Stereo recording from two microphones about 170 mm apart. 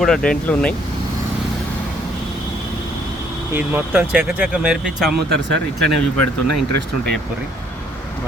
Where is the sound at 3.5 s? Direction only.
10° right (ahead or behind).